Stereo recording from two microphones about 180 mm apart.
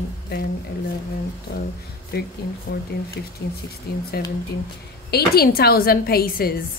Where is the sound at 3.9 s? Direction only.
60° left (ahead or behind).